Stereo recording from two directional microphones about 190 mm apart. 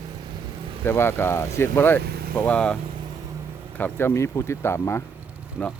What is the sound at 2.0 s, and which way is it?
Vehicle, 55° right (ahead or behind).